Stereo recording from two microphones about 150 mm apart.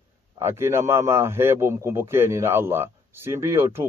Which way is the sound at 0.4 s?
15° right (ahead or behind).